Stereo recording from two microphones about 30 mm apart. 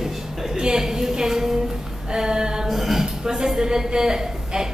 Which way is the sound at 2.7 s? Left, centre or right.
Centre.